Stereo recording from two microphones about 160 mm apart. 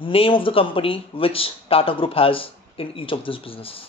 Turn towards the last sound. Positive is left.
turn(degrees=35)  # may be behind; listen again after turning